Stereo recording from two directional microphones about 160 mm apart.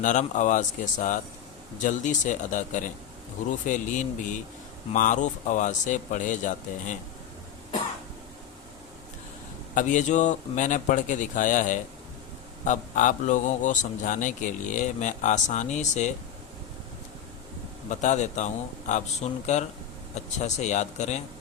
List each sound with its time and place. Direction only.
0.0 s a man's voice: 50° left (ahead or behind)
9.7 s a man's voice: 50° left (ahead or behind)
17.8 s a man's voice: 50° left (ahead or behind)